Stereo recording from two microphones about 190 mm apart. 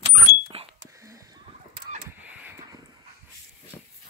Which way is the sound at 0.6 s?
30° right (ahead or behind).